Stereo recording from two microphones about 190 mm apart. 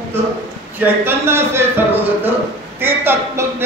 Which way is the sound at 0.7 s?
10° right (ahead or behind).